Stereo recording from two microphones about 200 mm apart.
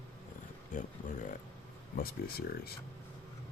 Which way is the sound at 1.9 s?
50° left (ahead or behind).